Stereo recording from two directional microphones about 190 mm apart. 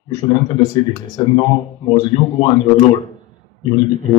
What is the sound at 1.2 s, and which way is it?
Speech, 25° left (ahead or behind).